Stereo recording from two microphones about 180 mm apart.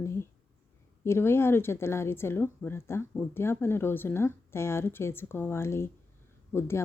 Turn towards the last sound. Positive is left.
turn(degrees=15)  # may be behind; listen again after turning